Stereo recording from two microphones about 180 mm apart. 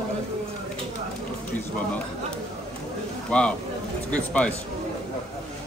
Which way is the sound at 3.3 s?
5° left (ahead or behind).